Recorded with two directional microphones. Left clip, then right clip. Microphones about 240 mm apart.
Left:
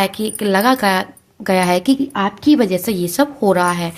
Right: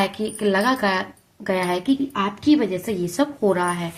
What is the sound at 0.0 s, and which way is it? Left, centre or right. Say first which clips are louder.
A woman's voice: left 3 dB; left.